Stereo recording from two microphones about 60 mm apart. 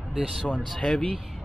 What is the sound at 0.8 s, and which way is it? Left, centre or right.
Speech, centre.